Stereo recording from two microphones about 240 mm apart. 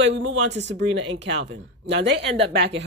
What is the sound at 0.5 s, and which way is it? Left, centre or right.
Speech, right.